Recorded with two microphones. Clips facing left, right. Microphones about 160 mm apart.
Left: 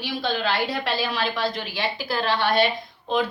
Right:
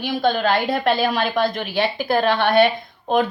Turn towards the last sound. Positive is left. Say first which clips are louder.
# right 5 dB
turn(degrees=-55)  # may be behind; listen again after turning